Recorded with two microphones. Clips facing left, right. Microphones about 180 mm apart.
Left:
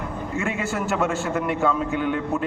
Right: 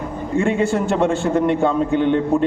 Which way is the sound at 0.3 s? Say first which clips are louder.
Right 9 dB; 30° right (ahead or behind).